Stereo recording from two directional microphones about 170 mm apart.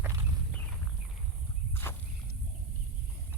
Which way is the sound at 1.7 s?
15° left (ahead or behind).